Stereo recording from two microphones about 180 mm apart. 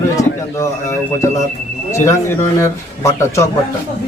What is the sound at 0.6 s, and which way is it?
A man's voice, 15° left (ahead or behind).